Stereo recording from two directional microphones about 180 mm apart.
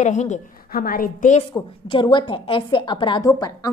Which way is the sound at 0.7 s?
55° left (ahead or behind).